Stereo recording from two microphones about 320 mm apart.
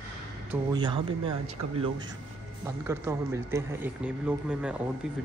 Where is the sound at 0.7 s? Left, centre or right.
Centre.